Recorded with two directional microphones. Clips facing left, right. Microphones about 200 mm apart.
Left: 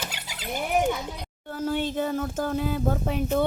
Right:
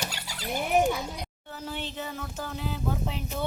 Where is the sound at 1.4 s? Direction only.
50° left (ahead or behind).